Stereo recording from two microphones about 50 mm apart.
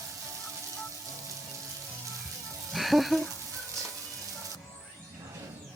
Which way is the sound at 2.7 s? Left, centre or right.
Centre.